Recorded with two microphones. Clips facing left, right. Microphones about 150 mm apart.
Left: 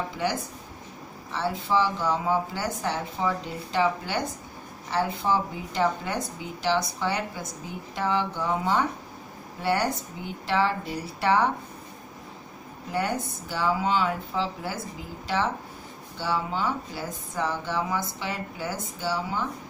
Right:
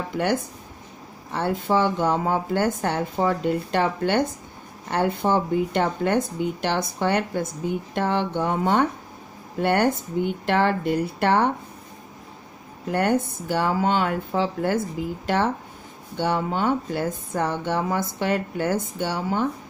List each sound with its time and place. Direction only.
1.3 s speech: 50° right (ahead or behind)
12.9 s speech: 60° right (ahead or behind)
16.2 s speech: 60° right (ahead or behind)